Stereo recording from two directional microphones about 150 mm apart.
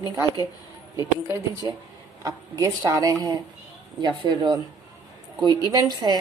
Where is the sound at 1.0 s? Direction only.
20° right (ahead or behind).